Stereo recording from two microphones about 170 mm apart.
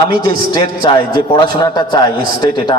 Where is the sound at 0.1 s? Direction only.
25° left (ahead or behind).